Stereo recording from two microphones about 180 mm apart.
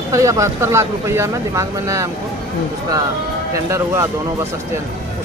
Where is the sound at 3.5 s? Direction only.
15° right (ahead or behind).